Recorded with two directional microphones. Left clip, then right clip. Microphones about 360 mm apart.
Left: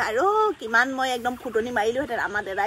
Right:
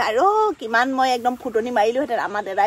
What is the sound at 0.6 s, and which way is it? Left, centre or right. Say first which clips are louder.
Speech: right 3 dB; right.